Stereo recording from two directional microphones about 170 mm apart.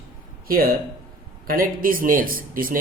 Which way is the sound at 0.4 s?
60° right (ahead or behind).